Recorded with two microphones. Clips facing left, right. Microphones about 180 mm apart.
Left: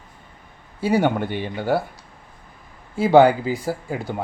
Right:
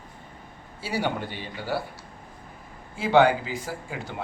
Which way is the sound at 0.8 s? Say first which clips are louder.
Left 9 dB; 50° left (ahead or behind).